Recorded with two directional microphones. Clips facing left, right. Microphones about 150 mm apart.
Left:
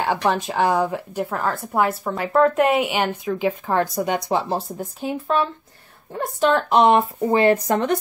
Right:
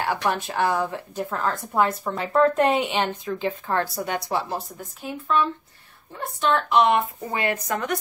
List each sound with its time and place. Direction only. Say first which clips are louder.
0.0 s speech: left 4 dB; 20° left (ahead or behind)
6.1 s a woman's voice: left 4 dB; 35° left (ahead or behind)